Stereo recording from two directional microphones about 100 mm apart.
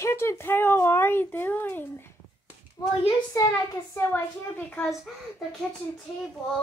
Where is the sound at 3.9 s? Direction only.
20° left (ahead or behind).